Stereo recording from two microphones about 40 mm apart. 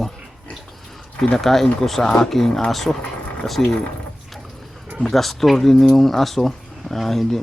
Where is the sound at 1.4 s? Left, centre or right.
Centre.